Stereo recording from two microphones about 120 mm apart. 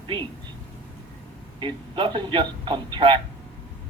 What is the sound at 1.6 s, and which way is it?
A man's voice, 45° right (ahead or behind).